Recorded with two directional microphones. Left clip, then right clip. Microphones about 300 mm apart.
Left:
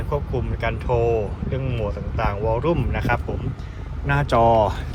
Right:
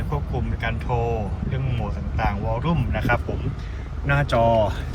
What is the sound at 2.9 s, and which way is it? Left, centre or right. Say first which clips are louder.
Speech: even; centre.